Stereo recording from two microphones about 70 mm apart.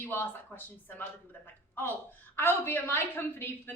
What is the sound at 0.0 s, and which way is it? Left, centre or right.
A woman's voice, left.